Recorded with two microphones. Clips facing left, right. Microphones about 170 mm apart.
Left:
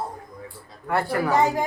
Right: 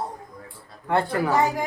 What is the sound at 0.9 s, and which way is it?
Speech, 20° right (ahead or behind).